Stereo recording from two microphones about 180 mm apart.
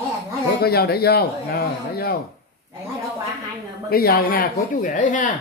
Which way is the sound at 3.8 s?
55° left (ahead or behind).